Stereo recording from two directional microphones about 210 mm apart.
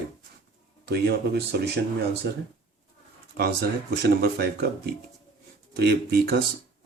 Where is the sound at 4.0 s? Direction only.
50° right (ahead or behind).